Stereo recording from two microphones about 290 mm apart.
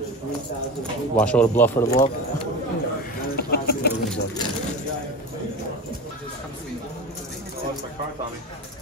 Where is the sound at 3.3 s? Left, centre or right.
Left.